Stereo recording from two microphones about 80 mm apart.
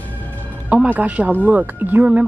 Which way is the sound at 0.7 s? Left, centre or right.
Centre.